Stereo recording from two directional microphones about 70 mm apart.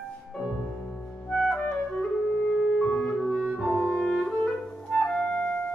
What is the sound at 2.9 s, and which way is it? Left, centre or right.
Clarinet, centre.